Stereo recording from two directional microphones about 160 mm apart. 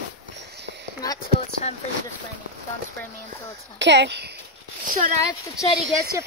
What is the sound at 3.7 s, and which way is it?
Speech, 90° right.